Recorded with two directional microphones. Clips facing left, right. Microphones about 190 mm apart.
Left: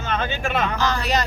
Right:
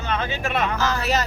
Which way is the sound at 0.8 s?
5° right (ahead or behind).